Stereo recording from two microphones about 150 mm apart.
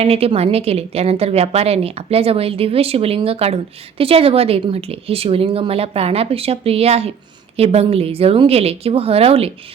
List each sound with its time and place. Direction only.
0.0 s a woman's voice: 40° right (ahead or behind)